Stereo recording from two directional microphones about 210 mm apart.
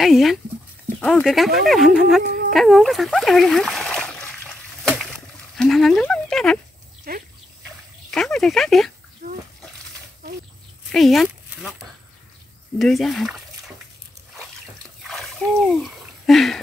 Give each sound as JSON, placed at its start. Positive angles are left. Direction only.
{"t": 0.0, "sound": "speech", "side_deg": 0}
{"t": 2.5, "sound": "splash", "side_deg": 0}
{"t": 5.6, "sound": "speech", "side_deg": 0}
{"t": 7.1, "sound": "dog", "side_deg": -45}
{"t": 8.1, "sound": "speech", "side_deg": 5}
{"t": 9.2, "sound": "splash", "side_deg": -55}
{"t": 10.9, "sound": "a sound", "side_deg": 0}
{"t": 12.7, "sound": "speech", "side_deg": 0}
{"t": 15.0, "sound": "a sound", "side_deg": 0}